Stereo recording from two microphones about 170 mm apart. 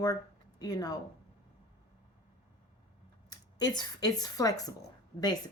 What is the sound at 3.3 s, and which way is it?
Speech, 25° left (ahead or behind).